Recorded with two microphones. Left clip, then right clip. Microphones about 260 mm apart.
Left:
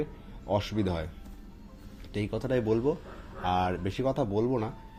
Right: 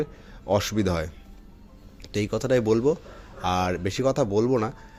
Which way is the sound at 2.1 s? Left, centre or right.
Right.